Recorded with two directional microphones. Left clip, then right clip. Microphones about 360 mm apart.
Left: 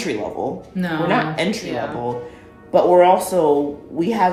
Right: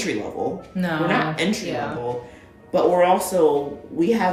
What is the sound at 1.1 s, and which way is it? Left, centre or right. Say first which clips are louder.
Speech: left 4 dB; centre.